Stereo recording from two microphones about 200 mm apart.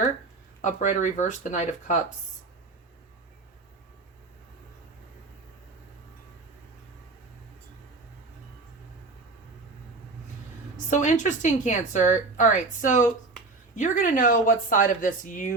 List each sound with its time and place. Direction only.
0.6 s a woman's voice: 40° left (ahead or behind)
10.8 s a woman's voice: 40° left (ahead or behind)